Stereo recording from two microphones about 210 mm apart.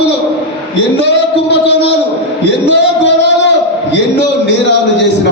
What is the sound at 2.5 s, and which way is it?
Speech, 55° left (ahead or behind).